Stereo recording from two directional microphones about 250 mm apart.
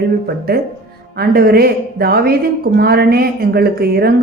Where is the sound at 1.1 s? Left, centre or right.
Right.